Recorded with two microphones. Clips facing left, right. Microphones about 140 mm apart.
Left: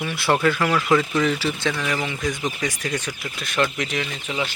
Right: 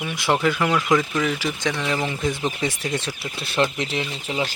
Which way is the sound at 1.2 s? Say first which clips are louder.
Left 2 dB; 10° right (ahead or behind).